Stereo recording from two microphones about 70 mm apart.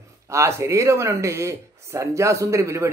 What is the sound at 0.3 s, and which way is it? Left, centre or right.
Speech, right.